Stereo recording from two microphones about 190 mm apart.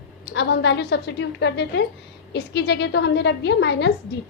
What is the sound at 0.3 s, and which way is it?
A woman's voice, 65° left (ahead or behind).